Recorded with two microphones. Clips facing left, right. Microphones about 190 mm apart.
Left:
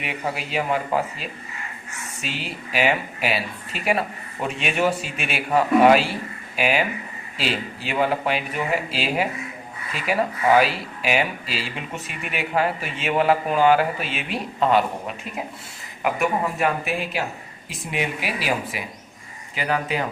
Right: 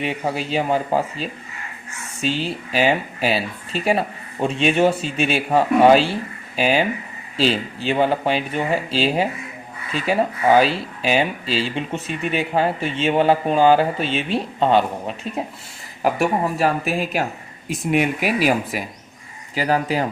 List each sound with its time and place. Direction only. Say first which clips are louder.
0.0 s speech: right 5 dB; 30° right (ahead or behind)